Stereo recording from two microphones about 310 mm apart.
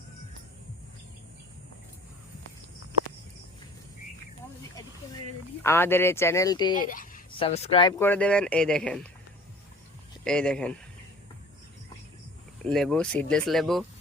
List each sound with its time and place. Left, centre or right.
5.6 s speech: centre
6.7 s speech: left; by 9.0 s centre
10.2 s speech: centre
12.6 s speech: centre